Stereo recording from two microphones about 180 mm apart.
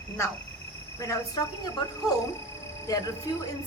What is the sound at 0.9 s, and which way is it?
Speech, 15° left (ahead or behind).